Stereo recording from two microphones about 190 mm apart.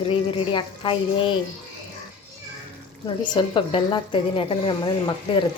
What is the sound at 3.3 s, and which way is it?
A woman's voice, 25° left (ahead or behind).